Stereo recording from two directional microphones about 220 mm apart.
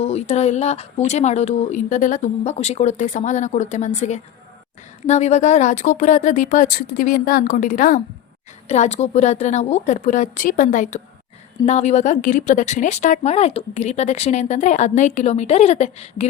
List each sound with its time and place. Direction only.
0.0 s a woman's voice: 30° left (ahead or behind)